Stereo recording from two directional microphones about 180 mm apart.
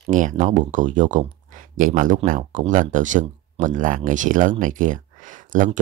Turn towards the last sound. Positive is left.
turn(degrees=-45)  # may be behind; listen again after turning